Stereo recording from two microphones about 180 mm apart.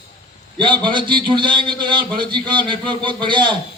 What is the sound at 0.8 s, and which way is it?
Speech, 25° right (ahead or behind).